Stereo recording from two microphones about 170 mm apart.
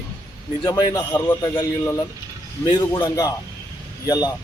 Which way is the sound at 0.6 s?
25° left (ahead or behind).